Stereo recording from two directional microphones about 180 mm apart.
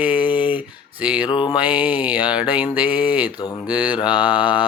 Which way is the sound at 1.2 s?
25° left (ahead or behind).